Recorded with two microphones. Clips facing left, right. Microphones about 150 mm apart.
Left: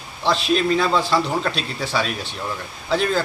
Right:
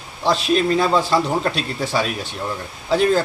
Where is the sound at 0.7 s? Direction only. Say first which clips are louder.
Right 2 dB; 10° right (ahead or behind).